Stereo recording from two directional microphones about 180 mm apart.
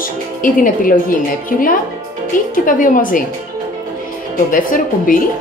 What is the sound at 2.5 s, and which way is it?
Speech, 50° left (ahead or behind).